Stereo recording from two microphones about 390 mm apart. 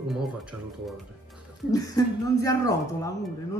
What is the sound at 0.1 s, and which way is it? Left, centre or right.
Speech, centre.